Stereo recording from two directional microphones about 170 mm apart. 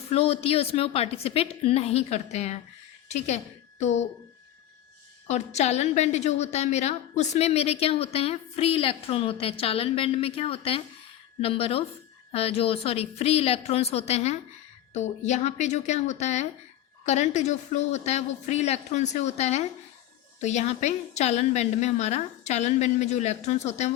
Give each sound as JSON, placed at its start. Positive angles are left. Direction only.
{"t": 0.1, "sound": "a woman's voice", "side_deg": 35}
{"t": 5.3, "sound": "a woman's voice", "side_deg": 40}